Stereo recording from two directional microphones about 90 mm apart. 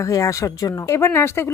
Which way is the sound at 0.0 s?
35° left (ahead or behind).